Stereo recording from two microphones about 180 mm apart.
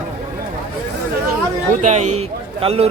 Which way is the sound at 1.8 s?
40° right (ahead or behind).